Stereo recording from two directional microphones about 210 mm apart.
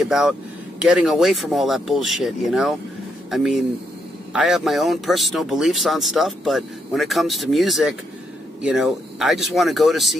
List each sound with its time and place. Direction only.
0.0 s speech: centre (ahead or behind)